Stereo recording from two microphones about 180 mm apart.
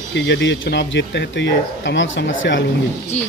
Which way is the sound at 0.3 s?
85° left.